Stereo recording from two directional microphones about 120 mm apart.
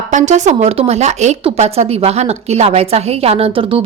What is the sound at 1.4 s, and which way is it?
A woman's voice, 60° right (ahead or behind).